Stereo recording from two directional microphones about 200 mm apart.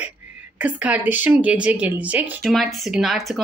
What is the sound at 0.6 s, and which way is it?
A woman's voice, 5° right (ahead or behind).